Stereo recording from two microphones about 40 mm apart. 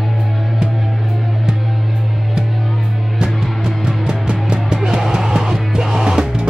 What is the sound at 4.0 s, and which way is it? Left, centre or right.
Music, right.